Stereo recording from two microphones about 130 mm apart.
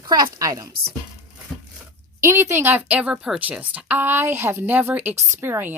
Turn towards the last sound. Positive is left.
turn(degrees=-15)  # may be behind; listen again after turning